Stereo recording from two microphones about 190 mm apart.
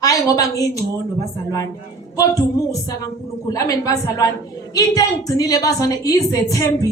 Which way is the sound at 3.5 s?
20° left (ahead or behind).